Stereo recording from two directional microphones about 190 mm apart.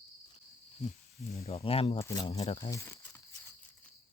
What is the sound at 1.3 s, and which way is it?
Speech, 35° left (ahead or behind).